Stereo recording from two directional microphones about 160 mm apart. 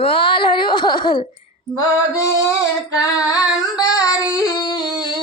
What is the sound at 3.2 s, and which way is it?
Singing, 20° left (ahead or behind).